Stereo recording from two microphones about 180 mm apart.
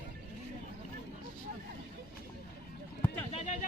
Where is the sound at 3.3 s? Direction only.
35° left (ahead or behind).